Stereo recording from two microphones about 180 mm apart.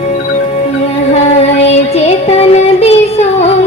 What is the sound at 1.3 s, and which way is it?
Music, 35° left (ahead or behind).